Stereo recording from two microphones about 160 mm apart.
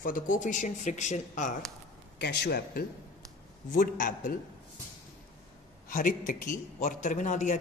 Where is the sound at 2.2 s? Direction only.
90° left.